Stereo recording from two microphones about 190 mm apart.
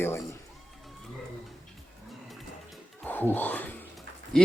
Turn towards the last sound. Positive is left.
turn(degrees=5)  # may be behind; listen again after turning